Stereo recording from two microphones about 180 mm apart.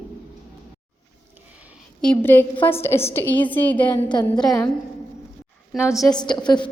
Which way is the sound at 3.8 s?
25° left (ahead or behind).